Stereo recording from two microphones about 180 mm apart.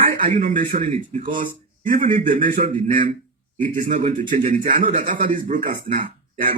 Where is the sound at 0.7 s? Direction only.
35° right (ahead or behind).